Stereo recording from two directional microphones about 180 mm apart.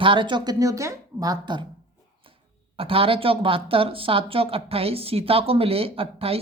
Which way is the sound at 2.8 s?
30° right (ahead or behind).